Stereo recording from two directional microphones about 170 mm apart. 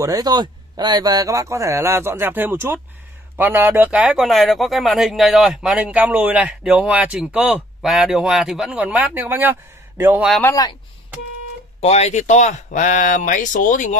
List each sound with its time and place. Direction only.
0.0 s speech: 20° right (ahead or behind)
10.4 s speech: 20° left (ahead or behind)
11.8 s speech: 40° left (ahead or behind)